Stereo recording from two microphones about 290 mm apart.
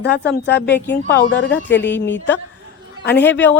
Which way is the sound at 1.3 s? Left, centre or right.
Left.